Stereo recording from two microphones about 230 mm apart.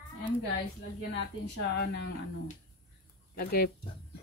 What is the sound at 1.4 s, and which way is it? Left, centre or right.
Speech, left.